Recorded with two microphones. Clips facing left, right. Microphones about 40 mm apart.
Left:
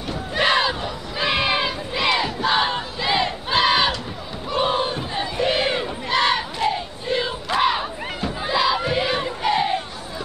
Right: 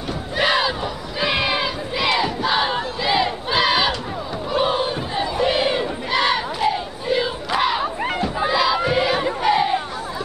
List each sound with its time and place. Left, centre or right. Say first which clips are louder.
0.4 s crowd: even; centre
1.2 s battle cry: even; centre
4.5 s crowd: right 1 dB; centre
5.1 s battle cry: right 2 dB; centre
9.4 s crowd: right 2 dB; centre